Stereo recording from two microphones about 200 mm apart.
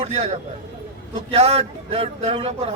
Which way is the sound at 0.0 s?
30° right (ahead or behind).